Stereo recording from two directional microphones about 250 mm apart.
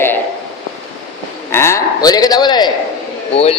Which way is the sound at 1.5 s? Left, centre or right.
Centre.